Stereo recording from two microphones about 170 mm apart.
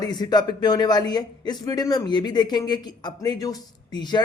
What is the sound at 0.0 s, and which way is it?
Speech, 25° left (ahead or behind).